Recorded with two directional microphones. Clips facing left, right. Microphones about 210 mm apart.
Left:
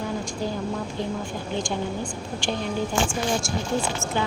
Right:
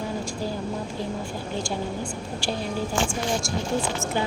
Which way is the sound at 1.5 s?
5° right (ahead or behind).